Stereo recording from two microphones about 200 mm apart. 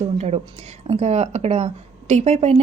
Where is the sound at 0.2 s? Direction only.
30° right (ahead or behind).